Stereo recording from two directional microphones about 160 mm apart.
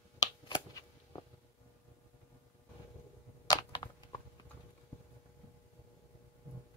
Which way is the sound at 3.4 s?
30° left (ahead or behind).